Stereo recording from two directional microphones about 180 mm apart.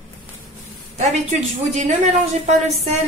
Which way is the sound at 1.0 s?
40° right (ahead or behind).